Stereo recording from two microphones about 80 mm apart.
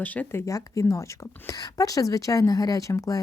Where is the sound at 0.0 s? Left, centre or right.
Centre.